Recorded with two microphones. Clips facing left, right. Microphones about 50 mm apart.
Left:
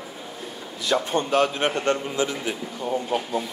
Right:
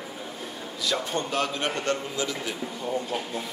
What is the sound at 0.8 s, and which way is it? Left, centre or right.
A man's voice, left.